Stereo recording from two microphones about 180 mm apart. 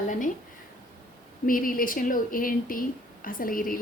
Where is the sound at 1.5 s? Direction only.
50° left (ahead or behind).